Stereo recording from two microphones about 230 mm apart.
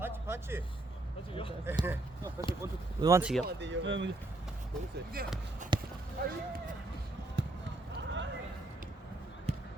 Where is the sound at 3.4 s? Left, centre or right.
Right.